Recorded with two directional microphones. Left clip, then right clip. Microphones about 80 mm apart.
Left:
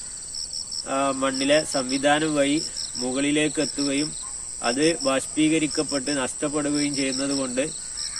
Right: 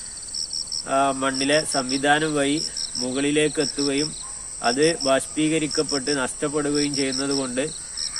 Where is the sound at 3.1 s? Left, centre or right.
Right.